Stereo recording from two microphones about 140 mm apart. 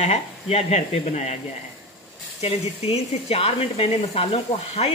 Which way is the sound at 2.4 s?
50° left (ahead or behind).